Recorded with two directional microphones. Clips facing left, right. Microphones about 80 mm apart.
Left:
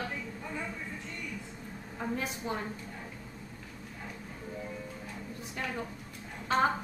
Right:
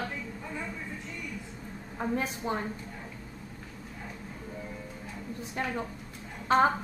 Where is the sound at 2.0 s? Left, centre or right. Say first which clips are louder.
Right 4 dB; right.